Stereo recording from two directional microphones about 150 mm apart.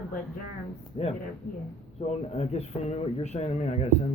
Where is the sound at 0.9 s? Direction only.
45° left (ahead or behind).